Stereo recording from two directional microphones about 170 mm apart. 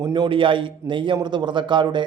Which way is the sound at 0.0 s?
25° right (ahead or behind).